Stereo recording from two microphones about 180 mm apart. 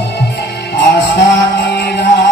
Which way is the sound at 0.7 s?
70° left (ahead or behind).